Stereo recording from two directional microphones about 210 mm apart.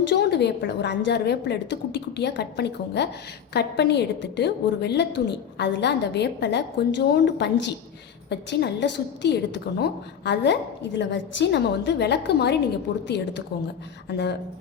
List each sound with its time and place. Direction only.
0.1 s a woman's voice: 55° left (ahead or behind)